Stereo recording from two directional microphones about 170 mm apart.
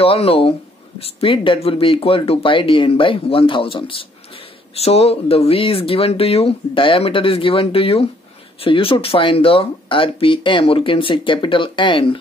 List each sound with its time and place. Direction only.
0.0 s speech: 35° left (ahead or behind)